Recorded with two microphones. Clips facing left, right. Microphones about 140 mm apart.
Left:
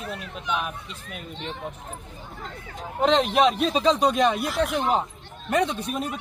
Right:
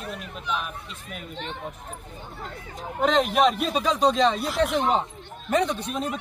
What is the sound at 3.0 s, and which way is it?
Speech, centre (ahead or behind).